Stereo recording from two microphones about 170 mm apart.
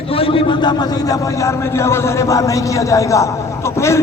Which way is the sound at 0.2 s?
30° left (ahead or behind).